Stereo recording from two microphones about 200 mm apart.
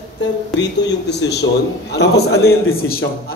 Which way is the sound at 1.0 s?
55° left (ahead or behind).